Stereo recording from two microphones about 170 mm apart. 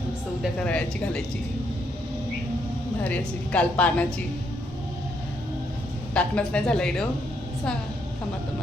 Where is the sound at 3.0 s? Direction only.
5° left (ahead or behind).